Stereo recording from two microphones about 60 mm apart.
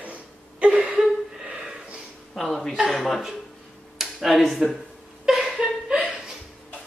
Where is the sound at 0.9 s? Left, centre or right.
Centre.